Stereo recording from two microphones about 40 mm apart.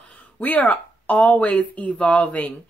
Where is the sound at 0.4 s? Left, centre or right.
Left.